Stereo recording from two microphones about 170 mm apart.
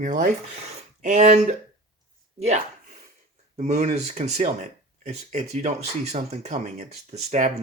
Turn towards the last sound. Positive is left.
turn(degrees=-45)  # may be behind; listen again after turning